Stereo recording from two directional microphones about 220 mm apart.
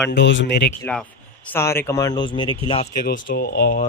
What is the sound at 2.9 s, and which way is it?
Speech, 40° left (ahead or behind).